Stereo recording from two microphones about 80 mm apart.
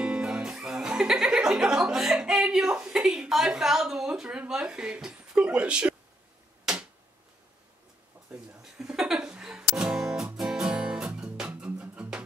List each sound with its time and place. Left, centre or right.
0.0 s speech: centre
6.6 s a sound: centre
8.3 s speech: centre
8.7 s music: centre